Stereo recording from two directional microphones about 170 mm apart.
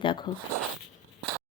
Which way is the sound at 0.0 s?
30° left (ahead or behind).